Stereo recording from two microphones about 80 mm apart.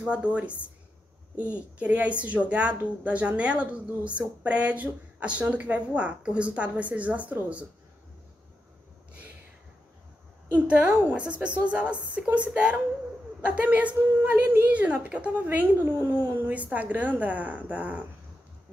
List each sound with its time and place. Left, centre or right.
0.0 s a woman's voice: centre
10.5 s a woman's voice: centre
16.4 s a woman's voice: centre